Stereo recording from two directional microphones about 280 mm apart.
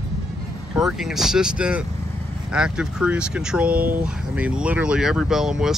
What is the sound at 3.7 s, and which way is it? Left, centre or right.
Speech, right.